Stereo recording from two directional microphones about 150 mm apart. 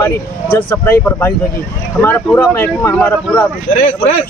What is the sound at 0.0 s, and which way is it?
Speech, 15° left (ahead or behind).